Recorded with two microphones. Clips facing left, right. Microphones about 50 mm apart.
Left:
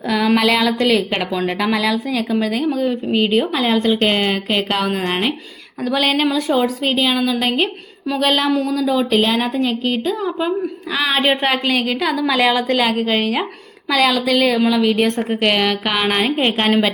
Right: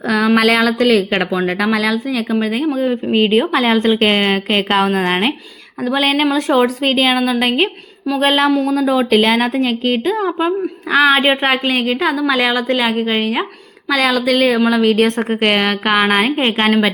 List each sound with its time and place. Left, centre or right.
0.1 s a woman's voice: right
0.3 s speech: right
1.2 s a woman's voice: right
3.5 s a woman's voice: right
6.3 s a woman's voice: right
8.4 s a woman's voice: right
8.7 s a woman's voice: right
13.9 s a woman's voice: right
15.4 s a woman's voice: right